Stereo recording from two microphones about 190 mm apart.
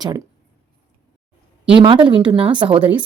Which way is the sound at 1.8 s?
25° right (ahead or behind).